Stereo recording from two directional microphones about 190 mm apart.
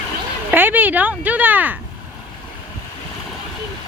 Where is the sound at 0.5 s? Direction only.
10° right (ahead or behind).